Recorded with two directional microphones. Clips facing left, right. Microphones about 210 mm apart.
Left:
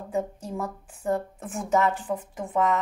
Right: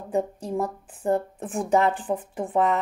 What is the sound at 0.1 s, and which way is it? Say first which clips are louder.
Speech: right 4 dB; 35° right (ahead or behind).